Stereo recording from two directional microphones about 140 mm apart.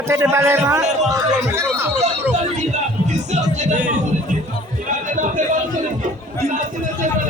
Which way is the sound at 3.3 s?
55° right (ahead or behind).